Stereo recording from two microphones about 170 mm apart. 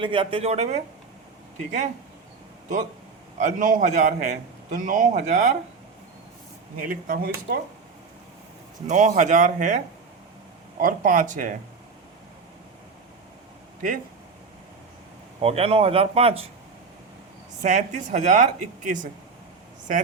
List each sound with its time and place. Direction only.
0.0 s speech: 30° right (ahead or behind)
3.3 s a man's voice: 50° right (ahead or behind)
6.7 s speech: 55° right (ahead or behind)
8.9 s a man's voice: 50° right (ahead or behind)
13.8 s a man's voice: 50° right (ahead or behind)
15.4 s speech: 35° right (ahead or behind)
17.6 s a man's voice: 45° right (ahead or behind)